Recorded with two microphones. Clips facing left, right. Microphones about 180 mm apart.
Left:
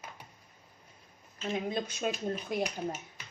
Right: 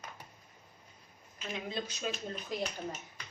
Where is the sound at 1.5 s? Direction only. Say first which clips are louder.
Left 5 dB; 50° left (ahead or behind).